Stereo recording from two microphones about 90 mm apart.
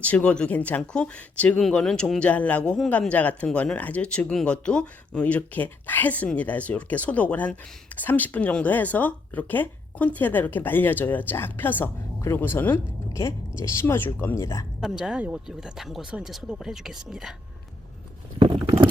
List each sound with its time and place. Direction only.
0.0 s speech: 15° left (ahead or behind)
14.8 s speech: 5° right (ahead or behind)
18.3 s a sound: 75° right (ahead or behind)